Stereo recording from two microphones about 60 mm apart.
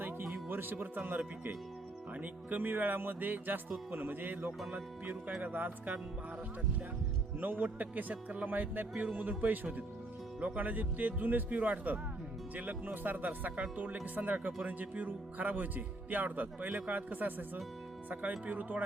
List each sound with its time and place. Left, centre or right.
0.4 s speech: right
7.3 s speech: right